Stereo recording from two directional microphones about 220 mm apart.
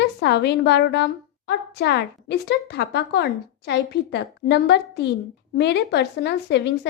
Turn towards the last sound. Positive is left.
turn(degrees=50)  # may be behind; listen again after turning